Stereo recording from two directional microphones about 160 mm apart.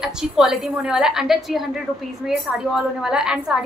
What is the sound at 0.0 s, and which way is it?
A woman's voice, 5° right (ahead or behind).